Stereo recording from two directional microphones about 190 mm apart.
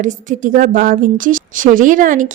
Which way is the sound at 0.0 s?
40° right (ahead or behind).